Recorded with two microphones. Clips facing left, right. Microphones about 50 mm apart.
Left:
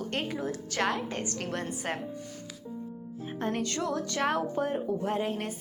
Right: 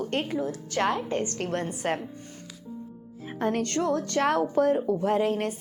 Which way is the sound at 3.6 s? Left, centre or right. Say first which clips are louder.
Right 5 dB; right.